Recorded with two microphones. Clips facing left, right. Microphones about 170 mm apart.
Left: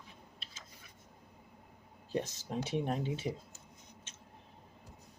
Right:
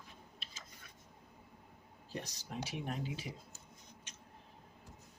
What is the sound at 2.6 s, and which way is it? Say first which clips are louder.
Speech: left 7 dB; 25° left (ahead or behind).